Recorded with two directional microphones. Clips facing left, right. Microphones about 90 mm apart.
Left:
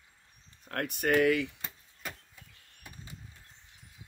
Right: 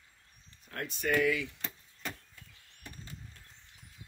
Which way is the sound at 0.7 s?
55° left (ahead or behind).